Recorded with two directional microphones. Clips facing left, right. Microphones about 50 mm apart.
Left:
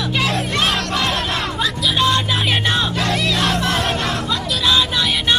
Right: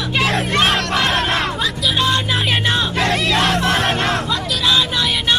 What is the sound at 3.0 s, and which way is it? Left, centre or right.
Battle cry, right.